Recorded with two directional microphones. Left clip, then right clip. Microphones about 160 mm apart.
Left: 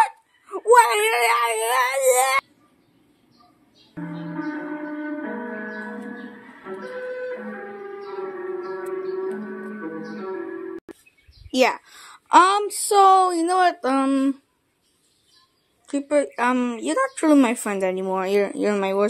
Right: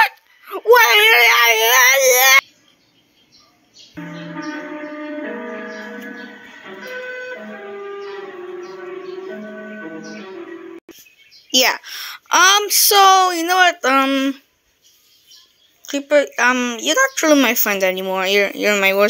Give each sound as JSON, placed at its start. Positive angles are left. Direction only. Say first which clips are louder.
{"t": 0.0, "sound": "whimper", "louder": "right 4 dB", "side_deg": -5}
{"t": 4.0, "sound": "music", "louder": "right 1 dB", "side_deg": -20}
{"t": 11.5, "sound": "speech", "louder": "right 4 dB", "side_deg": 5}
{"t": 15.9, "sound": "speech", "louder": "right 6 dB", "side_deg": 5}